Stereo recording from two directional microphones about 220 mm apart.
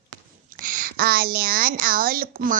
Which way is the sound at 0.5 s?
40° right (ahead or behind).